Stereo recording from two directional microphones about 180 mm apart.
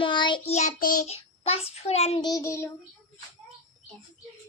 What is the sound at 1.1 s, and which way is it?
A child's voice, 35° left (ahead or behind).